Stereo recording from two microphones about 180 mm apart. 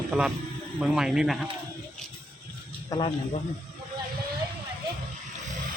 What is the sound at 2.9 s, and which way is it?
Speech, 20° left (ahead or behind).